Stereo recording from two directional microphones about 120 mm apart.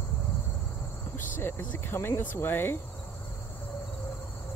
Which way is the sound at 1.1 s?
15° left (ahead or behind).